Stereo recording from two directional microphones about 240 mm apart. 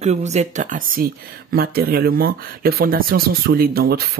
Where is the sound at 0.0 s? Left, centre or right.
Right.